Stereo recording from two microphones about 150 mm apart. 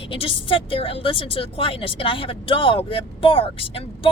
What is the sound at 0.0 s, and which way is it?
A woman's voice, 35° left (ahead or behind).